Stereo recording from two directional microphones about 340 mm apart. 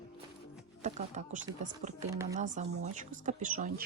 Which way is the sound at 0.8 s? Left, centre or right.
Right.